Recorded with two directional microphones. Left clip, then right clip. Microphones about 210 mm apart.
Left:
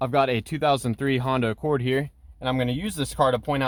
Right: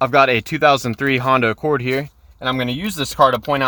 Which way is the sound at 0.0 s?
15° right (ahead or behind).